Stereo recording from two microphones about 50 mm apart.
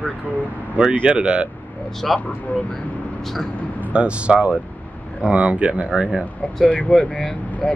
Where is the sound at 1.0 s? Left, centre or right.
Right.